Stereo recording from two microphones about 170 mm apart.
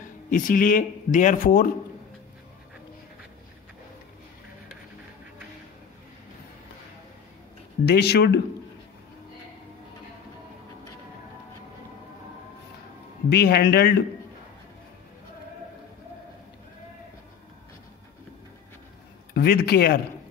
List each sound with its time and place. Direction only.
0.0 s speech: 50° left (ahead or behind)
7.8 s a man's voice: 75° left (ahead or behind)
13.3 s a man's voice: 70° left (ahead or behind)
19.3 s speech: 65° left (ahead or behind)